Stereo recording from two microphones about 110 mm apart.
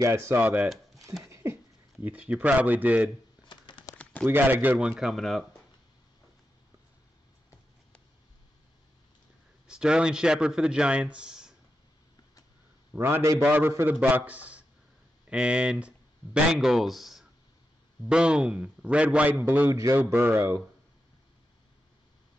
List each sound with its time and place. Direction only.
0.0 s speech: 25° right (ahead or behind)
3.4 s bird: 45° left (ahead or behind)
3.9 s a sound: 10° left (ahead or behind)
4.3 s a man's voice: 20° right (ahead or behind); by 5.5 s centre (ahead or behind)
9.7 s a man's voice: 10° right (ahead or behind)
12.9 s a man's voice: 20° right (ahead or behind)